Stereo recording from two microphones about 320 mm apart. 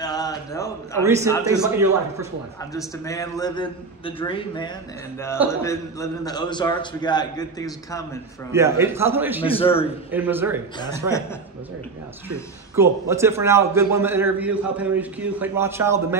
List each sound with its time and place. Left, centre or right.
0.0 s a sound: centre
1.0 s a man's voice: centre
3.1 s a man's voice: centre
8.5 s a man's voice: centre
9.4 s a man's voice: centre
10.1 s a man's voice: centre
12.7 s a man's voice: centre